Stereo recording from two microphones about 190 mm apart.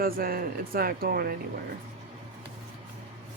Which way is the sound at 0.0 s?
50° right (ahead or behind).